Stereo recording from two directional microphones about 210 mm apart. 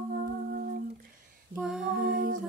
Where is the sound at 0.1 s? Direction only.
45° right (ahead or behind).